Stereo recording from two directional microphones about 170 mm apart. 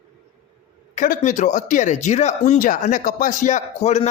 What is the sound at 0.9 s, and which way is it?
Speech, 45° left (ahead or behind).